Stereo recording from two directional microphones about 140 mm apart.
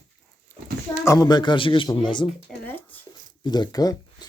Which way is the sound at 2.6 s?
15° left (ahead or behind).